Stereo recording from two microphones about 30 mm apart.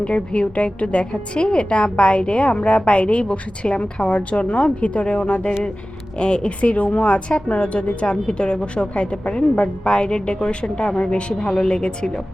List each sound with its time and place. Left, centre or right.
0.0 s a woman's voice: left
6.7 s speech: left
7.3 s a woman's voice: left